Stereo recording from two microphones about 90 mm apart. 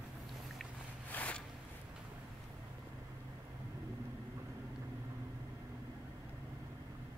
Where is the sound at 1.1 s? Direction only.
15° left (ahead or behind).